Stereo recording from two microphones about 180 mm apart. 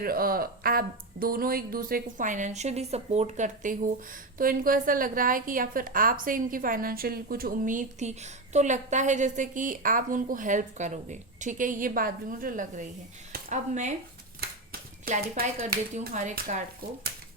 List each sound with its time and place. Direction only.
0.0 s a woman's voice: 55° right (ahead or behind)
14.7 s a sound: 55° right (ahead or behind)
16.1 s a woman's voice: 45° right (ahead or behind)